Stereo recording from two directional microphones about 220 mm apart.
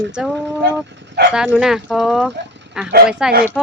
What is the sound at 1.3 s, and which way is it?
Speech, 5° right (ahead or behind).